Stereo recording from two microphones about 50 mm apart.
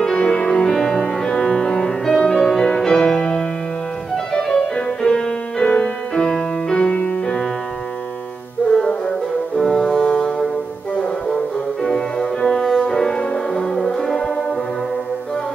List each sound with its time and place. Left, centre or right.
0.0 s music: centre
8.7 s music: centre
9.6 s brass instrument: centre
11.8 s music: centre
12.5 s music: centre
12.8 s music: centre